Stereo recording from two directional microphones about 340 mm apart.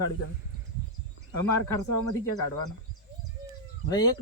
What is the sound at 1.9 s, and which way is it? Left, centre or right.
Speech, left.